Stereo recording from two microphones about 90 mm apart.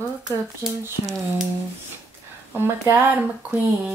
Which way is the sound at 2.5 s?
25° right (ahead or behind).